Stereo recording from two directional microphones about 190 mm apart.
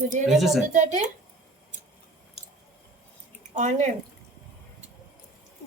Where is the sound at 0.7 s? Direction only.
40° right (ahead or behind).